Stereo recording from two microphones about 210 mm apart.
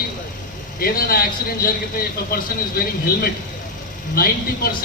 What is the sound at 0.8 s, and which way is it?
A man's voice, 45° left (ahead or behind).